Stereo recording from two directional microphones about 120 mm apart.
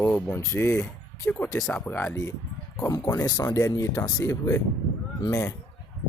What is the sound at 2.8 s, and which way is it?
Speech, 30° left (ahead or behind).